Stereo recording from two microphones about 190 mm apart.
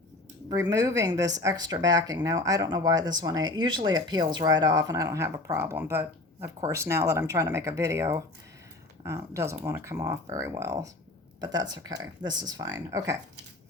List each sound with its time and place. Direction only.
0.5 s a woman's voice: 15° right (ahead or behind)